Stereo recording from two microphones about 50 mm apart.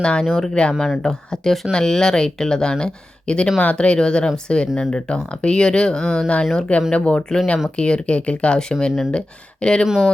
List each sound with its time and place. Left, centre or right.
0.0 s speech: centre
0.3 s speech: centre
6.9 s speech: left
9.8 s speech: centre